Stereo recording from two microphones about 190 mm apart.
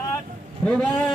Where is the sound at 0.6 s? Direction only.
5° left (ahead or behind).